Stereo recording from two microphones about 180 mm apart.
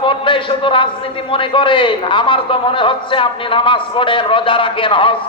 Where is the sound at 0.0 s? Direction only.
30° left (ahead or behind).